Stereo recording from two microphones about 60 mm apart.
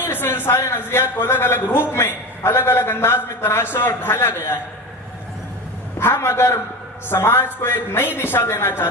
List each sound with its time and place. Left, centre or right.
0.0 s a man's voice: left
6.0 s a man's voice: left